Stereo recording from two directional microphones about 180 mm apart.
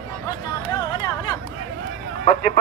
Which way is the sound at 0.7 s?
25° left (ahead or behind).